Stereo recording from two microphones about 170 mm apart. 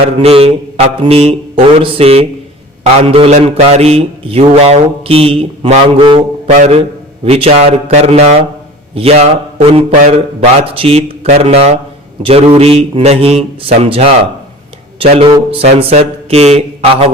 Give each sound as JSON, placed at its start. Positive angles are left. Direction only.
{"t": 0.2, "sound": "mantra", "side_deg": -35}
{"t": 6.5, "sound": "a man's voice", "side_deg": -45}
{"t": 7.3, "sound": "mantra", "side_deg": -35}